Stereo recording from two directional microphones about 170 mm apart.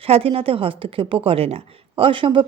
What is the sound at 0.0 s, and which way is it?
Speech, 35° right (ahead or behind).